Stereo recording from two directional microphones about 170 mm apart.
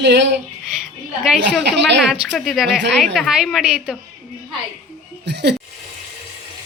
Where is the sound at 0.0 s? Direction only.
90° right.